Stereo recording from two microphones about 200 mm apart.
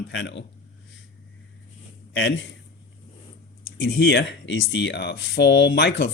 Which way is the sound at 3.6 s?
65° left (ahead or behind).